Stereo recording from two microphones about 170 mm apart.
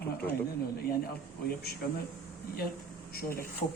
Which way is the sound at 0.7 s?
65° left (ahead or behind).